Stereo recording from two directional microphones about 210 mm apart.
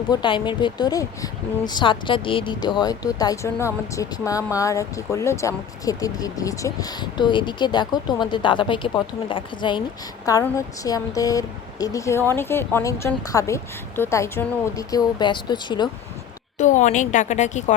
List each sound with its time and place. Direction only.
0.1 s speech: 20° left (ahead or behind)
16.6 s a woman's voice: 35° left (ahead or behind)